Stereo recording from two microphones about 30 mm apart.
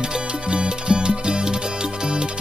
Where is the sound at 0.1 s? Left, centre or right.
Right.